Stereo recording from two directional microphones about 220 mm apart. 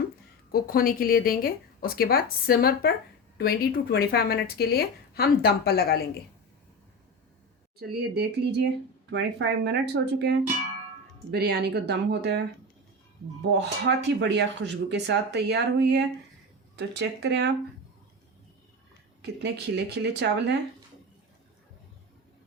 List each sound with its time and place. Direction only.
0.5 s speech: 40° left (ahead or behind)
7.8 s speech: 45° right (ahead or behind)
13.5 s speech: 50° right (ahead or behind)
19.2 s speech: 50° right (ahead or behind)